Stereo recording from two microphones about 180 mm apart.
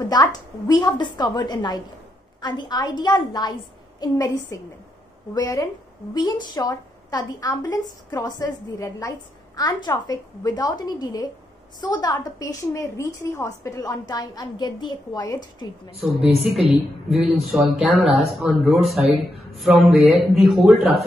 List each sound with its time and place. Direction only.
0.1 s a woman's voice: 20° left (ahead or behind)
16.0 s speech: centre (ahead or behind)